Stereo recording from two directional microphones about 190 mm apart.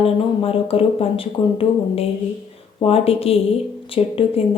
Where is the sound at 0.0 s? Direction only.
30° left (ahead or behind).